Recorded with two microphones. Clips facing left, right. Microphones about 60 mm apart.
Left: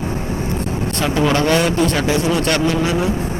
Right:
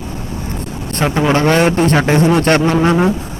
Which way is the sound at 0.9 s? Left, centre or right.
Right.